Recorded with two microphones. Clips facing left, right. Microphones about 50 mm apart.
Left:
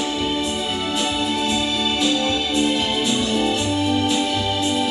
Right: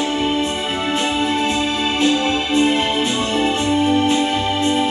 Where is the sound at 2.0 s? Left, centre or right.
Right.